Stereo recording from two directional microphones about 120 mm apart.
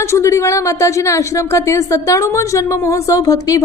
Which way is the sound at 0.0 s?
25° left (ahead or behind).